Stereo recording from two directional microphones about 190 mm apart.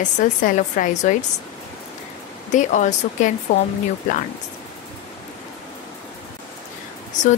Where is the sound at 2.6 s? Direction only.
40° left (ahead or behind).